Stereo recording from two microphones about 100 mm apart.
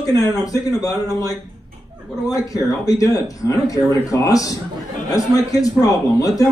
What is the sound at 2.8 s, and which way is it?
Speech, 35° left (ahead or behind).